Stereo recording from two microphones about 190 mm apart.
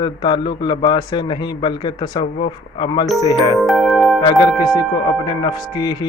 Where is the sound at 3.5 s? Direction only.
Centre (ahead or behind).